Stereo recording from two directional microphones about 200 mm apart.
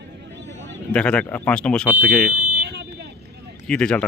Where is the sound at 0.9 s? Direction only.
5° left (ahead or behind).